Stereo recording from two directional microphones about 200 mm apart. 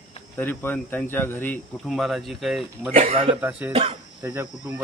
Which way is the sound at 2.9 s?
30° right (ahead or behind).